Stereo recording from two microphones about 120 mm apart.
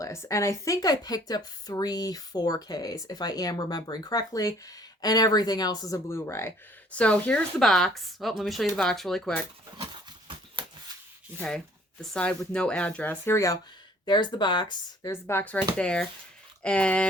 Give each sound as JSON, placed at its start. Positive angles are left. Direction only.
{"t": 0.0, "sound": "speech", "side_deg": 25}
{"t": 6.9, "sound": "speech", "side_deg": 10}
{"t": 9.7, "sound": "dog", "side_deg": -40}
{"t": 11.3, "sound": "speech", "side_deg": 5}
{"t": 14.0, "sound": "speech", "side_deg": 40}
{"t": 15.1, "sound": "speech", "side_deg": 20}